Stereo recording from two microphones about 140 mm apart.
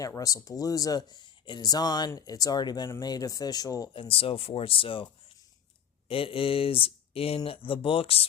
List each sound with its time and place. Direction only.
0.0 s speech: 25° left (ahead or behind)
6.1 s speech: 40° left (ahead or behind)